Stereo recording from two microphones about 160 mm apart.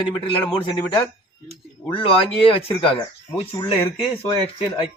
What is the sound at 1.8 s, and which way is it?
Speech, 10° left (ahead or behind).